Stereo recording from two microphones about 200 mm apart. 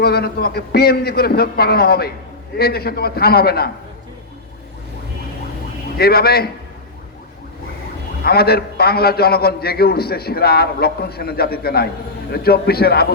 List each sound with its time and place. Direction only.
0.0 s a man's voice: 50° left (ahead or behind)
6.0 s a man's voice: 50° left (ahead or behind)
8.2 s a man's voice: 50° left (ahead or behind)